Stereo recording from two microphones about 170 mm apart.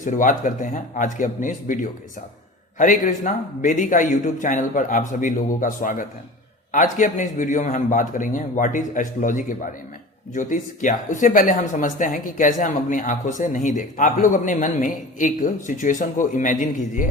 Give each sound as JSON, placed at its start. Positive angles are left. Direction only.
{"t": 0.0, "sound": "speech", "side_deg": 50}